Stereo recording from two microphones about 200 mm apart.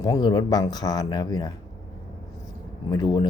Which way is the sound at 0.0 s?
20° left (ahead or behind).